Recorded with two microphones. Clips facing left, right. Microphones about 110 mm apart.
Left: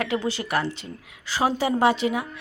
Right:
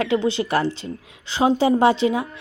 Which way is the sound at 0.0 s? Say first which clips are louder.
Right 6 dB; 25° right (ahead or behind).